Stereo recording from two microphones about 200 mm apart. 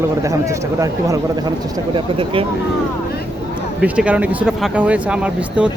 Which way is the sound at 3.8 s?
5° right (ahead or behind).